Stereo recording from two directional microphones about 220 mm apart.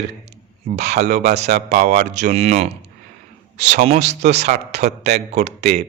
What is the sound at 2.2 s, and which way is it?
A man's voice, 30° right (ahead or behind).